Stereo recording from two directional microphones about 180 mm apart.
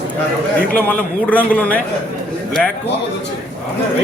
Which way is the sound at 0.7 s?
10° left (ahead or behind).